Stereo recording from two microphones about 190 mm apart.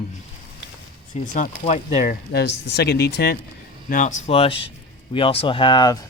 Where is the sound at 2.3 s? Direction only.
60° left (ahead or behind).